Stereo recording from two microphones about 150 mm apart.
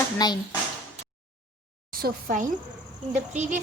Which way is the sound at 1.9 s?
70° right (ahead or behind).